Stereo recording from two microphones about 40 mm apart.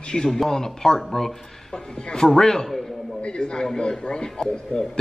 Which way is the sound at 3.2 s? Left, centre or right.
Left.